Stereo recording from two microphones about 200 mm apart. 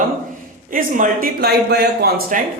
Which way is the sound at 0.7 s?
45° right (ahead or behind).